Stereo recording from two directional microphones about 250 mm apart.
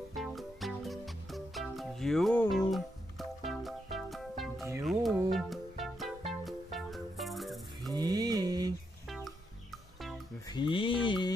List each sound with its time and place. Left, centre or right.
0.1 s music: centre
7.9 s mantra: centre
9.0 s music: centre
10.5 s music: centre